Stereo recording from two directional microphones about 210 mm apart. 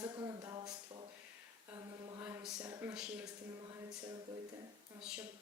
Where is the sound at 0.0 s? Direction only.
15° right (ahead or behind).